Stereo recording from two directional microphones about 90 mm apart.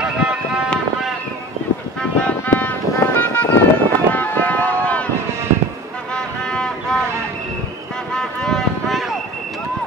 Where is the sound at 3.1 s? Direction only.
20° left (ahead or behind).